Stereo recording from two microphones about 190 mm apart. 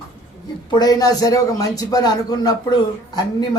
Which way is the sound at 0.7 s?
20° left (ahead or behind).